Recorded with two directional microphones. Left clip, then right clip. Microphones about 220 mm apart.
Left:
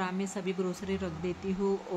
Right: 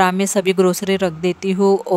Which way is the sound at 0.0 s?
50° right (ahead or behind).